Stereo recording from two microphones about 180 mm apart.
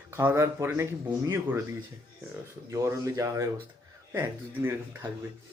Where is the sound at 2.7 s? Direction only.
15° right (ahead or behind).